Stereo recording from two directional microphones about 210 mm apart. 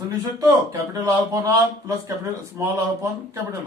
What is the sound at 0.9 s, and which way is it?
Speech, 15° right (ahead or behind).